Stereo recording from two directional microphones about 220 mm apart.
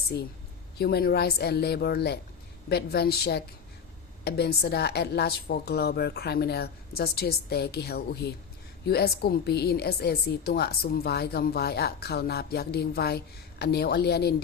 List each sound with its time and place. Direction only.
0.8 s a woman's voice: 45° left (ahead or behind)